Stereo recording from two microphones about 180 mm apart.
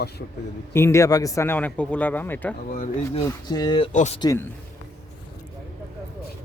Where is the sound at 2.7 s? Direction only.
45° left (ahead or behind).